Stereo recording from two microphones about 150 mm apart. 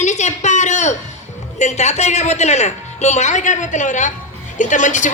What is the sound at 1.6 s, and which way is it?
A man's voice, 50° left (ahead or behind).